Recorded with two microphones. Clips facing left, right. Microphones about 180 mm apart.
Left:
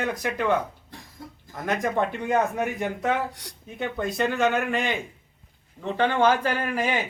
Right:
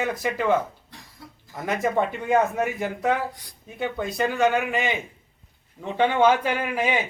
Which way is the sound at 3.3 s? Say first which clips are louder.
Left 5 dB; 75° left (ahead or behind).